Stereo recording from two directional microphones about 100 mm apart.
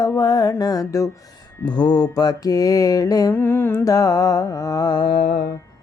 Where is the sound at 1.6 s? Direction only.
45° left (ahead or behind).